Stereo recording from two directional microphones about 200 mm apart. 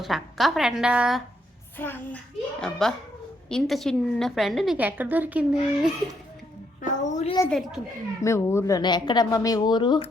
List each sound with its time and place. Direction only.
0.0 s a woman's voice: centre (ahead or behind)
1.8 s child singing: 10° left (ahead or behind)
2.6 s a woman's voice: 5° left (ahead or behind)
6.8 s a child's voice: 35° left (ahead or behind)
8.2 s speech: 15° left (ahead or behind)